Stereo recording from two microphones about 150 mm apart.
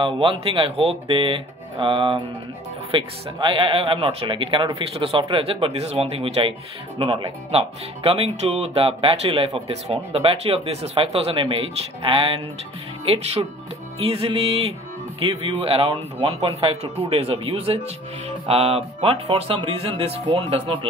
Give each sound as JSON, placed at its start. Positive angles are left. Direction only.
{"t": 0.0, "sound": "speech", "side_deg": -35}